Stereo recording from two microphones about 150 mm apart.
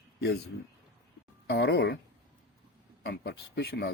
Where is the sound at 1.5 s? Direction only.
90° left.